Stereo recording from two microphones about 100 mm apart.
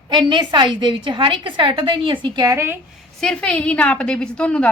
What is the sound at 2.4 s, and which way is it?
Speech, 35° right (ahead or behind).